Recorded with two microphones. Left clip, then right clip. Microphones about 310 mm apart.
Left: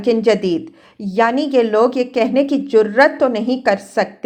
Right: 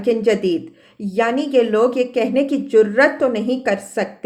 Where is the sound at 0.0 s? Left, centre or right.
Centre.